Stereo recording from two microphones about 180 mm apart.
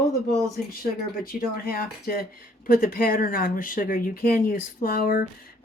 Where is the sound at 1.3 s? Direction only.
55° left (ahead or behind).